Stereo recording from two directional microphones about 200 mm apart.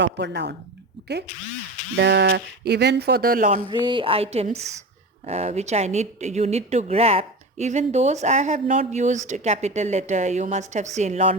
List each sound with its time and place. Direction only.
0.0 s speech: 60° right (ahead or behind)
2.0 s speech: 55° right (ahead or behind); by 3.6 s 40° right (ahead or behind)
3.7 s a sound: 25° right (ahead or behind)
5.2 s speech: 35° right (ahead or behind)